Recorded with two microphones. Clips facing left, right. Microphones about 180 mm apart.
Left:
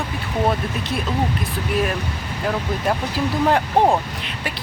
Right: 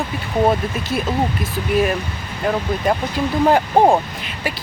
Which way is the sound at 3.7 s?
30° right (ahead or behind).